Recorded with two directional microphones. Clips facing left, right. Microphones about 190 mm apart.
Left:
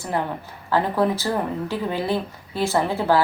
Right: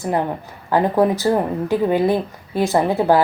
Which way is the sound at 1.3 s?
25° right (ahead or behind).